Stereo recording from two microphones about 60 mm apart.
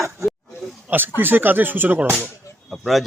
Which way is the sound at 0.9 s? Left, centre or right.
Right.